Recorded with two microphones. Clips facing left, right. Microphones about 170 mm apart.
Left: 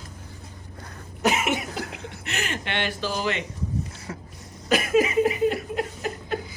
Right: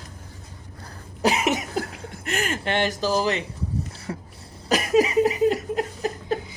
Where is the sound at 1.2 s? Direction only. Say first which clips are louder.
Right 2 dB; 35° right (ahead or behind).